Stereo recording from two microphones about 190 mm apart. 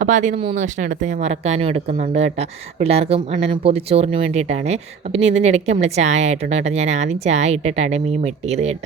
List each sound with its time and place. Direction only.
0.0 s speech: 40° right (ahead or behind)